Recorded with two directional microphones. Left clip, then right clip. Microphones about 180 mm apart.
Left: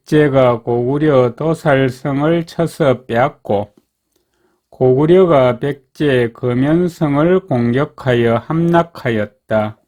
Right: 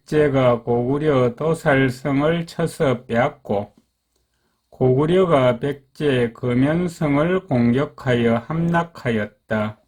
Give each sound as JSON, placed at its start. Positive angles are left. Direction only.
{"t": 0.0, "sound": "speech", "side_deg": 45}
{"t": 4.8, "sound": "speech", "side_deg": 30}